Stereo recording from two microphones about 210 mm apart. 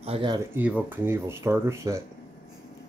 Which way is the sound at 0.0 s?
25° right (ahead or behind).